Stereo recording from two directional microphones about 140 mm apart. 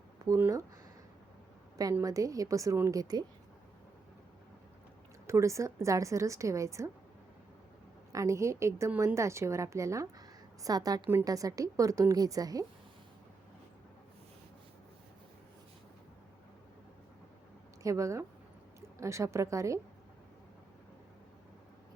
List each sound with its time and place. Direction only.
0.3 s speech: 15° right (ahead or behind)
1.7 s a woman's voice: 25° right (ahead or behind)
5.2 s a woman's voice: 20° right (ahead or behind)
8.1 s a woman's voice: 20° right (ahead or behind)
17.8 s a woman's voice: 20° right (ahead or behind)